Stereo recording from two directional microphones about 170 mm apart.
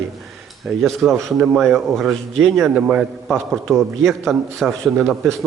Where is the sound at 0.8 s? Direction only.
Centre (ahead or behind).